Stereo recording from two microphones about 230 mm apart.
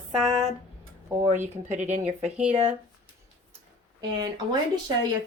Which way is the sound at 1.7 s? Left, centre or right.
Right.